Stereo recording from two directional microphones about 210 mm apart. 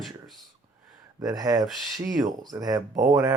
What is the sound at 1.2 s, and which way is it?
Speech, 15° right (ahead or behind).